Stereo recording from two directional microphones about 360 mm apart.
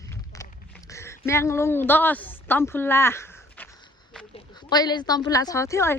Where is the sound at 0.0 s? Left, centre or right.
Centre.